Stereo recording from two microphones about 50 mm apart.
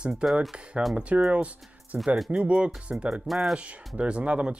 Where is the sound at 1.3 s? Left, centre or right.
Right.